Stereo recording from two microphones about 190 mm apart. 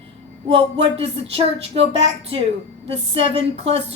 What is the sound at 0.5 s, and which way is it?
Speech, 35° right (ahead or behind).